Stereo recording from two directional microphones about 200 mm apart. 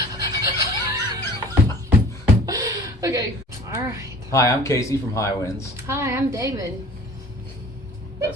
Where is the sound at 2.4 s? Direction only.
15° right (ahead or behind).